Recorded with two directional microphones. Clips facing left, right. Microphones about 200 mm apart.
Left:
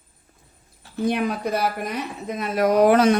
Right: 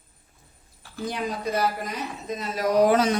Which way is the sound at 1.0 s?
60° left (ahead or behind).